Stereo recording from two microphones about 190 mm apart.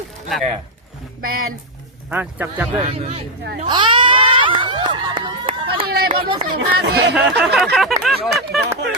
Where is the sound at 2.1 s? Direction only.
10° right (ahead or behind).